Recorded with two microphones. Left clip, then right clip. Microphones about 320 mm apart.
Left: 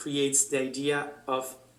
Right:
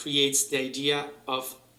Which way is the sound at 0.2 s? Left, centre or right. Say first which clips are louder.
Right 2 dB; centre.